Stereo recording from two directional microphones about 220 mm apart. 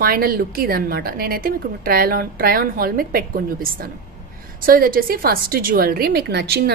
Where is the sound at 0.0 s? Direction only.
45° right (ahead or behind).